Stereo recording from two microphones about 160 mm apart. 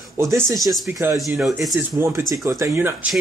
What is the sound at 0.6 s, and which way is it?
Speech, centre (ahead or behind).